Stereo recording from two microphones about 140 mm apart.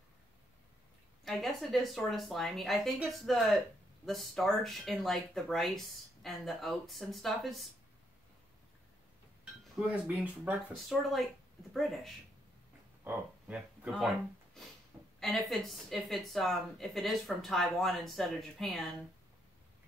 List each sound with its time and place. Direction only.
1.2 s speech: centre (ahead or behind)
9.4 s speech: 10° right (ahead or behind)
10.9 s speech: centre (ahead or behind)